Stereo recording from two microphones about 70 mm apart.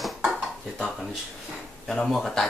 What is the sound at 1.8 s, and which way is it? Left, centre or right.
Speech, centre.